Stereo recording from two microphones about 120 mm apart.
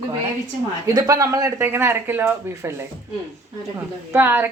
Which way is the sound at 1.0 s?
30° right (ahead or behind).